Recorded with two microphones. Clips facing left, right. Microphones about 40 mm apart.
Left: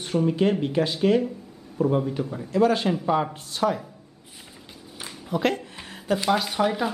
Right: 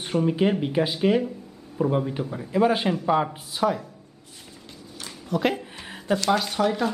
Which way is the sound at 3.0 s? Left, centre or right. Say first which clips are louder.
Right 1 dB; centre.